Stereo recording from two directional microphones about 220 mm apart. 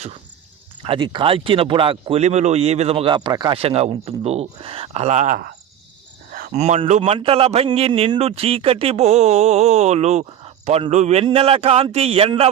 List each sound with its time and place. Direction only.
0.8 s speech: 20° right (ahead or behind)